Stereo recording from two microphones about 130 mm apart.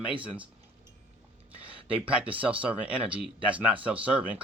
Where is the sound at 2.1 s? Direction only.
10° right (ahead or behind).